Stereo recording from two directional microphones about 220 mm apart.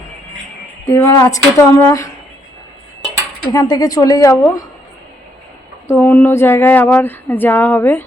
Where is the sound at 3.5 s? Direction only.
15° left (ahead or behind).